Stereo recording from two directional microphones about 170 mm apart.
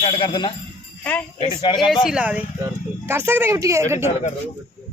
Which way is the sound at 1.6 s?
25° left (ahead or behind).